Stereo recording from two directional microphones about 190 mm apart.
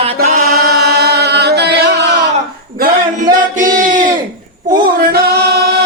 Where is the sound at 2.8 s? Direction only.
45° right (ahead or behind).